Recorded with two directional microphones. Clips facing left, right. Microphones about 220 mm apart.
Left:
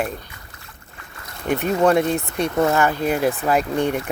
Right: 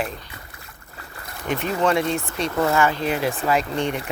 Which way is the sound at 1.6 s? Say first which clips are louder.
Left 4 dB; 40° left (ahead or behind).